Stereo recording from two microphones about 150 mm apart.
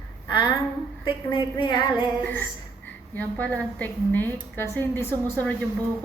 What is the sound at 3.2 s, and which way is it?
A woman's voice, 10° left (ahead or behind).